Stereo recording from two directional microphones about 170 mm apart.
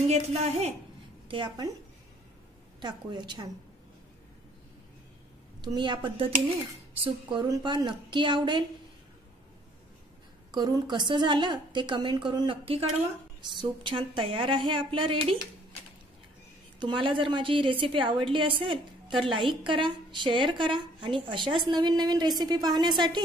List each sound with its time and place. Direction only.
0.0 s a woman's voice: 40° right (ahead or behind)
2.8 s a woman's voice: 25° right (ahead or behind)
5.6 s a woman's voice: 25° right (ahead or behind)
10.5 s a woman's voice: 25° right (ahead or behind)
16.8 s a woman's voice: 30° right (ahead or behind)